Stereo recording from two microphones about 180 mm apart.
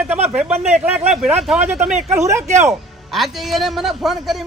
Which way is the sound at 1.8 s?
40° right (ahead or behind).